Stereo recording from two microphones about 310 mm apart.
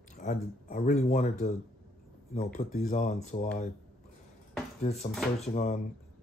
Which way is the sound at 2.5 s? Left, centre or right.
Left.